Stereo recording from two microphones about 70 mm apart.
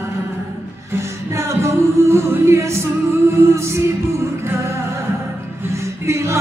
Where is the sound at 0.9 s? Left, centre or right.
Right.